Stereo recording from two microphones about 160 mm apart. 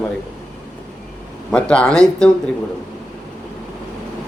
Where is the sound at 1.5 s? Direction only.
5° left (ahead or behind).